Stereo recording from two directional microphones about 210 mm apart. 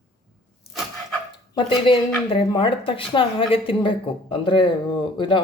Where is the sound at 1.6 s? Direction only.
25° left (ahead or behind).